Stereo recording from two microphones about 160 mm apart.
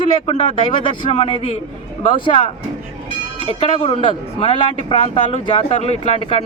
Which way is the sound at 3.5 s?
40° left (ahead or behind).